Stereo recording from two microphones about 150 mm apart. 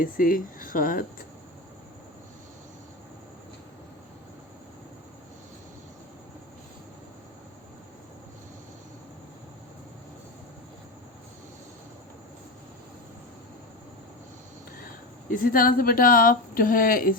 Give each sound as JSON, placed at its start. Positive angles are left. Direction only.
{"t": 0.0, "sound": "speech", "side_deg": 65}
{"t": 15.3, "sound": "speech", "side_deg": 75}